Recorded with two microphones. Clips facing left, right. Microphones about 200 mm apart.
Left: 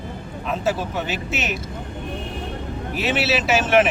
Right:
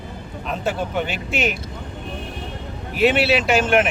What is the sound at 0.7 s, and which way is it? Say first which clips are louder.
Speech: right 1 dB; 5° left (ahead or behind).